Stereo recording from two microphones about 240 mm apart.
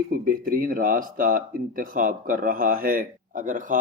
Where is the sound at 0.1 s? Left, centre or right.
Right.